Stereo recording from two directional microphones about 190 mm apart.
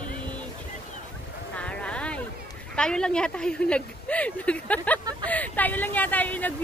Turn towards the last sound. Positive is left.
turn(degrees=10)  # may be behind; listen again after turning